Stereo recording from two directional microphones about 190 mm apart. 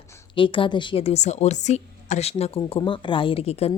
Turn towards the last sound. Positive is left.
turn(degrees=35)  # may be behind; listen again after turning